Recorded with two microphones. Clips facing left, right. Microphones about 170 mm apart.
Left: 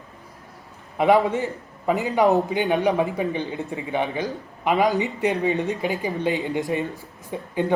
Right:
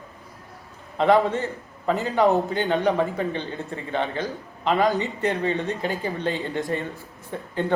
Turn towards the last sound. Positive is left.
turn(degrees=15)  # may be behind; listen again after turning